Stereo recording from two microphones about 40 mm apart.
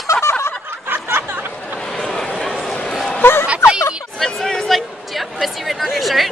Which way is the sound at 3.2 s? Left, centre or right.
Left.